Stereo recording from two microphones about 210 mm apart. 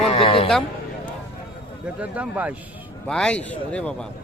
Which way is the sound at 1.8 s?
5° right (ahead or behind).